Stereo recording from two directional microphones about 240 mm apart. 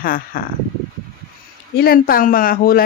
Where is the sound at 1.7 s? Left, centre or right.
Left.